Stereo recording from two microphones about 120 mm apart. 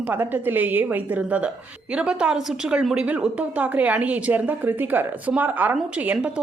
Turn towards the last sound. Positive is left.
turn(degrees=-10)  # may be behind; listen again after turning